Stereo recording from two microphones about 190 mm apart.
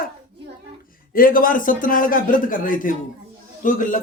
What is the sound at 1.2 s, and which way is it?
A man's voice, 45° left (ahead or behind).